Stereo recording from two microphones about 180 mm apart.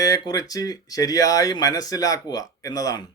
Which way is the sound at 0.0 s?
20° left (ahead or behind).